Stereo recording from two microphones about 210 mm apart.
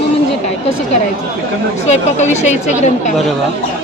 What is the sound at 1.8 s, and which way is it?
Speech, 35° left (ahead or behind).